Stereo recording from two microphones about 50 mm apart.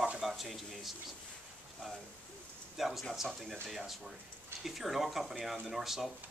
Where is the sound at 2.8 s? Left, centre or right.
Centre.